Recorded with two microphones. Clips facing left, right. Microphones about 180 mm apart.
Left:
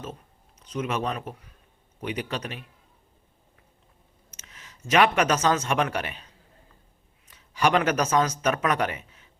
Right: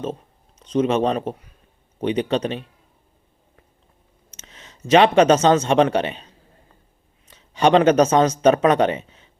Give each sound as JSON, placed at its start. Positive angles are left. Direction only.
{"t": 0.6, "sound": "speech", "side_deg": -30}
{"t": 4.3, "sound": "speech", "side_deg": -25}